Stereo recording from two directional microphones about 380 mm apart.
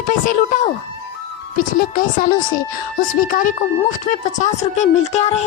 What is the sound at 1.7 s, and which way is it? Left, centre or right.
A child's voice, left.